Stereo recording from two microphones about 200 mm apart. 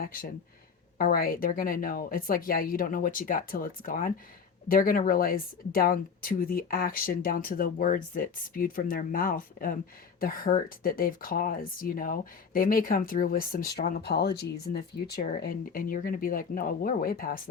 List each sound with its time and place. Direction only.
0.0 s speech: 45° left (ahead or behind)